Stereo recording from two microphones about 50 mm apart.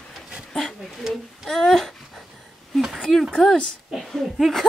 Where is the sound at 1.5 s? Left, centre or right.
Centre.